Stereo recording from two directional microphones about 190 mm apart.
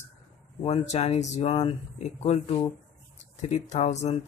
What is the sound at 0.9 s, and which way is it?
Speech, 35° left (ahead or behind).